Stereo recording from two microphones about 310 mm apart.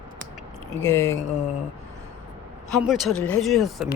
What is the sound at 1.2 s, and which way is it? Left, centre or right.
Speech, centre.